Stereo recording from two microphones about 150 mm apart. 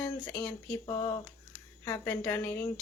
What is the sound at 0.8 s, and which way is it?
Speech, 30° left (ahead or behind).